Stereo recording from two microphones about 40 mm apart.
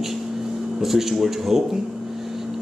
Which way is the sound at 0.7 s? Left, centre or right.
Centre.